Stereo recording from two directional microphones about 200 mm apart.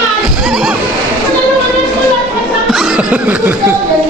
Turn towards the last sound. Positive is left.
turn(degrees=-10)  # may be behind; listen again after turning